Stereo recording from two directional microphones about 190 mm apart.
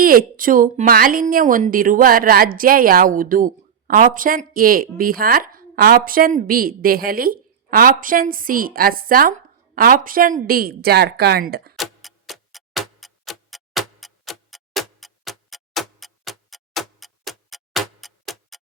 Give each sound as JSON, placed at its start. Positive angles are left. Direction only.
{"t": 0.0, "sound": "speech", "side_deg": -50}
{"t": 11.8, "sound": "tick-tock", "side_deg": 0}